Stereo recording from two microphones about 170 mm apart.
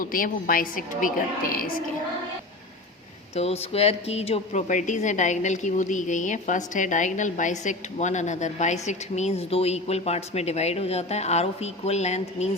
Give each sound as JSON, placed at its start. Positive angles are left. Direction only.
{"t": 0.0, "sound": "a woman's voice", "side_deg": 55}
{"t": 3.3, "sound": "a woman's voice", "side_deg": 35}